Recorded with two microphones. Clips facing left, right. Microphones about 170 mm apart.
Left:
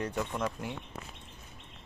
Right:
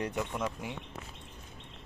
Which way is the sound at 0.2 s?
5° right (ahead or behind).